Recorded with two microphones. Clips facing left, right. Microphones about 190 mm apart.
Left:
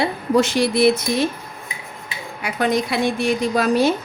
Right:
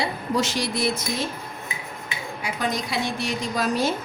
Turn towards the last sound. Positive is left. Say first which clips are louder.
# left 7 dB
turn(degrees=60)  # may be behind; listen again after turning